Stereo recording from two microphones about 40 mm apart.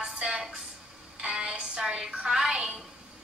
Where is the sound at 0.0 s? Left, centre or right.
Centre.